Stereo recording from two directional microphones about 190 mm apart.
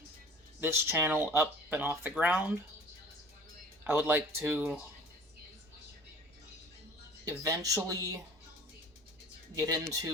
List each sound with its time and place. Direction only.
0.6 s speech: 15° right (ahead or behind)
3.8 s speech: 10° right (ahead or behind)
7.3 s speech: 20° right (ahead or behind)
9.6 s speech: 20° right (ahead or behind)